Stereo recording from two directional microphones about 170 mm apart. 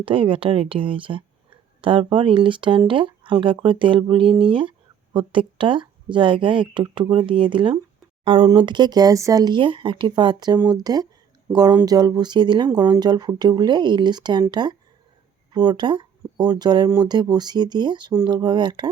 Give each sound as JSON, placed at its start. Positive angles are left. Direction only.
{"t": 0.0, "sound": "speech", "side_deg": -30}